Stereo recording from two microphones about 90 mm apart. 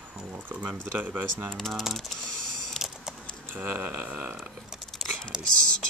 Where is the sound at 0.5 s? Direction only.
20° right (ahead or behind).